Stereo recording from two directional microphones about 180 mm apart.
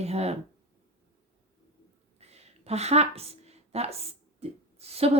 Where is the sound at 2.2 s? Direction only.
35° right (ahead or behind).